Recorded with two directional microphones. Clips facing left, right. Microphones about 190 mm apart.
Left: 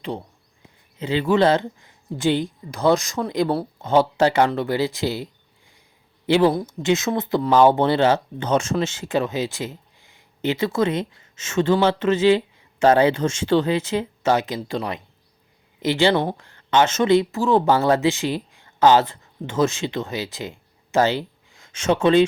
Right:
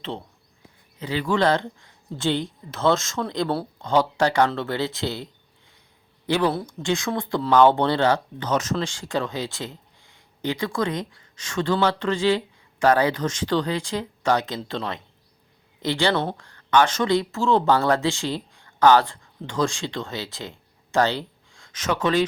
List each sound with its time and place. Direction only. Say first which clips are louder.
0.0 s speech: left 3 dB; 15° left (ahead or behind)
6.3 s speech: left 5 dB; 15° left (ahead or behind)